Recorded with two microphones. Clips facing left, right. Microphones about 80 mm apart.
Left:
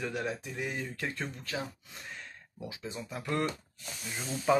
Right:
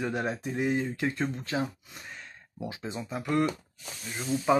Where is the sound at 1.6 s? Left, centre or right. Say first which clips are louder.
Right 7 dB; centre.